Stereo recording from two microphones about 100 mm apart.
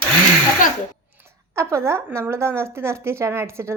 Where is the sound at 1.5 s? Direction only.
30° right (ahead or behind).